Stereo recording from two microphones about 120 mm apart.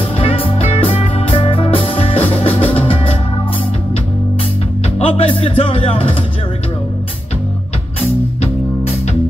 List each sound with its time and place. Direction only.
0.2 s music: 50° left (ahead or behind)
4.9 s speech: 50° left (ahead or behind)
8.4 s music: 60° left (ahead or behind)